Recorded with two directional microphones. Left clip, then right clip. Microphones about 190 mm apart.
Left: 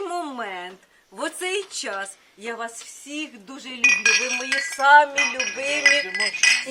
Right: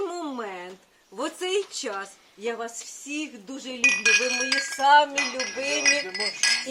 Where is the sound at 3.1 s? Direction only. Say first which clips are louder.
Left 1 dB; 5° left (ahead or behind).